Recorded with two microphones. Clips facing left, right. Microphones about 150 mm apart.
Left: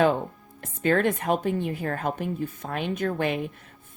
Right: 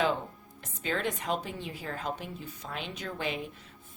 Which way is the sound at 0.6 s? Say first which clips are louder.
Left 10 dB; 55° left (ahead or behind).